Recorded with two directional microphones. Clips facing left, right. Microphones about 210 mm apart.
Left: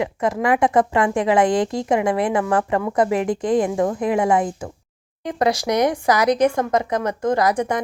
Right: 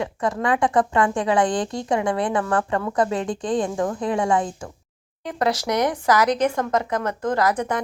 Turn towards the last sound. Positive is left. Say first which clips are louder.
# left 2 dB
turn(degrees=10)  # may be behind; listen again after turning